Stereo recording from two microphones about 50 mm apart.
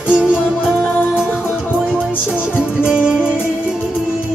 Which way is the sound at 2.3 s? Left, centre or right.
Centre.